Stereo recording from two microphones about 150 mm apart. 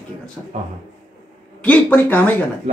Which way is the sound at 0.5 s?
45° right (ahead or behind).